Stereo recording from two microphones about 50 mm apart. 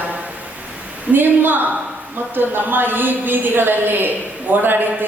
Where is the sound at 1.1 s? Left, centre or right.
Right.